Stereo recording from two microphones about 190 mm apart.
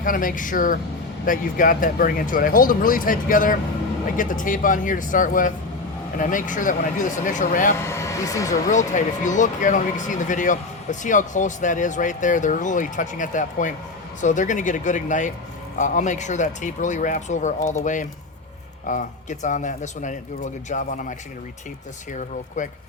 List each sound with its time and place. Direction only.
0.0 s speech: 45° left (ahead or behind)
7.8 s speech: 15° left (ahead or behind)
8.7 s speech: 40° left (ahead or behind)